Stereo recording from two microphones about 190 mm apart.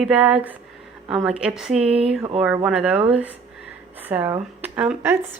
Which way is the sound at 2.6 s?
5° right (ahead or behind).